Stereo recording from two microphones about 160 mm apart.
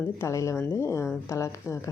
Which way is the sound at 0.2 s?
20° left (ahead or behind).